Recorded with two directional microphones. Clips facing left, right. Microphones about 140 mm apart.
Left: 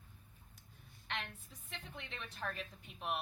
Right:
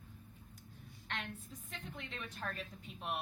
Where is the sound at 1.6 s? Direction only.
Centre (ahead or behind).